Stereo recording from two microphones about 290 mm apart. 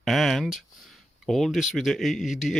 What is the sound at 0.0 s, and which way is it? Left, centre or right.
Speech, centre.